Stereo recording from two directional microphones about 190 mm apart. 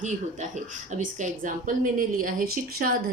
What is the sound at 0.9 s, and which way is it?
A woman's voice, 40° right (ahead or behind).